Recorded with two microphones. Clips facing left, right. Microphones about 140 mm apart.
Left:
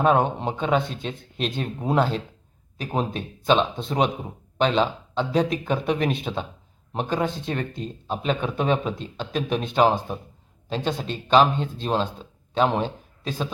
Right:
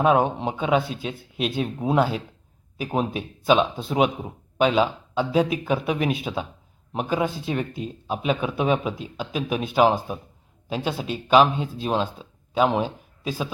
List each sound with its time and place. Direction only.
0.0 s speech: 5° right (ahead or behind)